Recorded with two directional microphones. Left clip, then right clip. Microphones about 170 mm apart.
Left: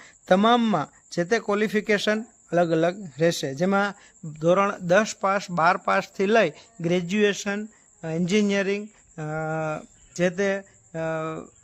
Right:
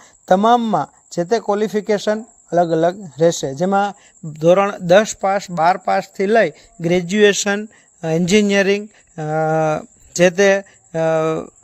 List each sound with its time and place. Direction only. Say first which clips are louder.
0.8 s speech: right 6 dB; 10° right (ahead or behind)
4.3 s speech: right 7 dB; 30° right (ahead or behind); by 6.7 s 15° right (ahead or behind)
6.8 s speech: right 8 dB; 25° right (ahead or behind)
7.3 s speech: right 10 dB; 45° right (ahead or behind)